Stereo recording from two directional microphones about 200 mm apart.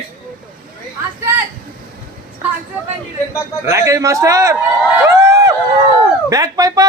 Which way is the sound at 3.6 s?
15° right (ahead or behind).